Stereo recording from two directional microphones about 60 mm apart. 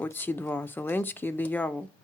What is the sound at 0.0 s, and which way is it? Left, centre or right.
Speech, left.